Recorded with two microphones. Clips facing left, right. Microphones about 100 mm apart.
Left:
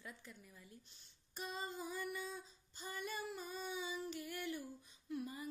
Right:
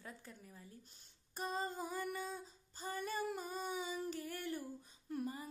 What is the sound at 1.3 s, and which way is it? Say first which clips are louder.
Female singing: right 5 dB; 45° right (ahead or behind).